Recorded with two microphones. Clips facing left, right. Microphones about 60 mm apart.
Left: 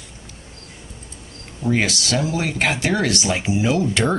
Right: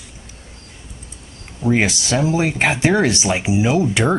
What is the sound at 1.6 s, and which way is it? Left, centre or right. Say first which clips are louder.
Speech: right 3 dB; centre.